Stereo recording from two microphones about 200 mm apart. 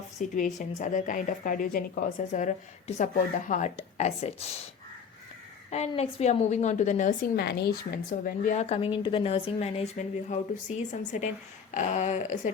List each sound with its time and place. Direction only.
0.2 s speech: 40° left (ahead or behind)
5.7 s speech: 30° left (ahead or behind); by 7.9 s 50° left (ahead or behind)
8.4 s speech: 35° left (ahead or behind)